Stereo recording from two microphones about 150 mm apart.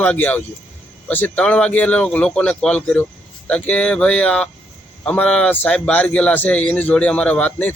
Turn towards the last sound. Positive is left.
turn(degrees=10)  # may be behind; listen again after turning